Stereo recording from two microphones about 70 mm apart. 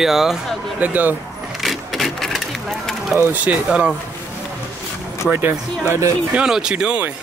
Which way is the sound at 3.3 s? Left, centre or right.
Right.